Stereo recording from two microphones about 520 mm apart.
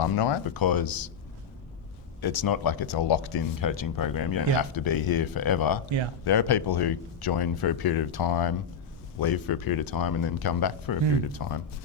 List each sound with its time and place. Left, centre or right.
0.0 s speech: left
2.2 s speech: left